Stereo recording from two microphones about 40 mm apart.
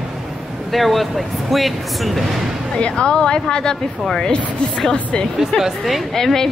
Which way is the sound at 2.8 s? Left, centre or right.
Left.